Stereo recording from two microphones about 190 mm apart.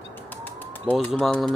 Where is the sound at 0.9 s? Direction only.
5° left (ahead or behind).